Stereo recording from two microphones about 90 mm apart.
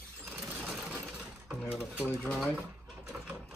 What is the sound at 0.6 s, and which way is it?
Vehicle, 15° right (ahead or behind).